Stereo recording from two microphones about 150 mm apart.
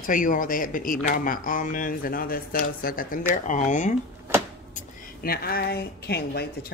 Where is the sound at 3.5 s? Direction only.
55° left (ahead or behind).